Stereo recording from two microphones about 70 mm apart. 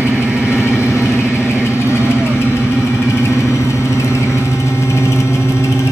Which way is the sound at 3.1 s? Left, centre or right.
Left.